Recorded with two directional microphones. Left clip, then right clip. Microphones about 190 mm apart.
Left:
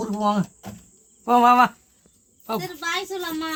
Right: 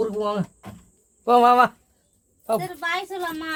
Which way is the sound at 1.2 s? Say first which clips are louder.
Even; 65° right (ahead or behind).